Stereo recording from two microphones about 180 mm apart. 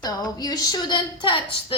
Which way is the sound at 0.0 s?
20° left (ahead or behind).